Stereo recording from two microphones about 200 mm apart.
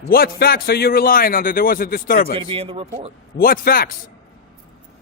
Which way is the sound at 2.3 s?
25° right (ahead or behind).